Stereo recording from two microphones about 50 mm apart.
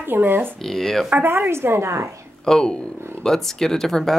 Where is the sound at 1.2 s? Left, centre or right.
Right.